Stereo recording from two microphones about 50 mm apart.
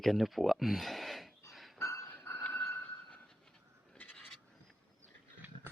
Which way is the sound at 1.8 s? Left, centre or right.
Left.